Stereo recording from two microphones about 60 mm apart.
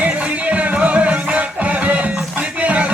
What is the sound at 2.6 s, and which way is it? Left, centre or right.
Music, right.